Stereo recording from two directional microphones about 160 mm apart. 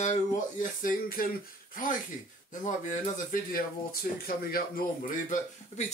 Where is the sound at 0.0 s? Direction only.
50° left (ahead or behind).